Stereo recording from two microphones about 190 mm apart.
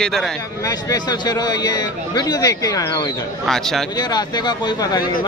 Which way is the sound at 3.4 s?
Centre (ahead or behind).